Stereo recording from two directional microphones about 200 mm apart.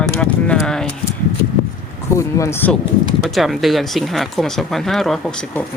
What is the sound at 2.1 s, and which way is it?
Speech, 15° left (ahead or behind).